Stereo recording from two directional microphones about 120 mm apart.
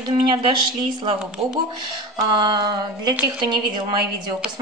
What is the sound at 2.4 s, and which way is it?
A woman's voice, 40° right (ahead or behind).